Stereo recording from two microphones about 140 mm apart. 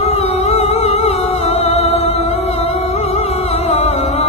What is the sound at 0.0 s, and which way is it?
Humming, 50° left (ahead or behind).